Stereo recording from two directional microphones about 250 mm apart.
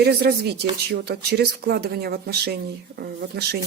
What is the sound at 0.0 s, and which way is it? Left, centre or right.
Speech, right.